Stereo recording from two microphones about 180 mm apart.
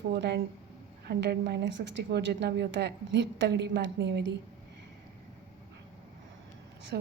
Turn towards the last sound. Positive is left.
turn(degrees=-60)  # may be behind; listen again after turning